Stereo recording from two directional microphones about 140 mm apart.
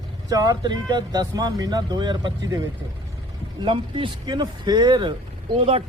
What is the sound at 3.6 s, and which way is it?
Speech, 35° right (ahead or behind).